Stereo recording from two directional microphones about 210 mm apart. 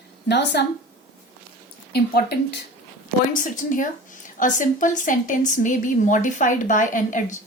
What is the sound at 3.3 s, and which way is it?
A woman's voice, 40° left (ahead or behind).